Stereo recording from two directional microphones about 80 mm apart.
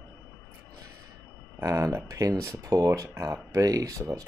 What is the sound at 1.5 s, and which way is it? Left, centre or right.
Speech, right.